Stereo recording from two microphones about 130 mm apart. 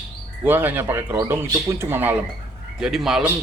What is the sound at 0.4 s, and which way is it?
Speech, 15° right (ahead or behind).